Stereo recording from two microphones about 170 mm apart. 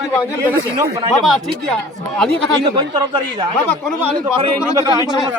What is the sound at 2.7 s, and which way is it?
Speech, 25° right (ahead or behind).